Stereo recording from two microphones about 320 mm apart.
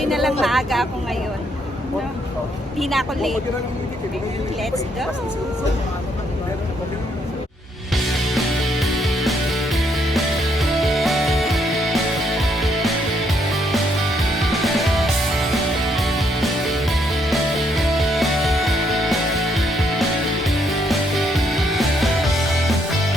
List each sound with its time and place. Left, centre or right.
0.0 s speech: centre
2.7 s speech: centre
7.9 s music: centre